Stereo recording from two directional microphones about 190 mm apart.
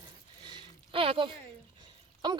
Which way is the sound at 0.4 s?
25° right (ahead or behind).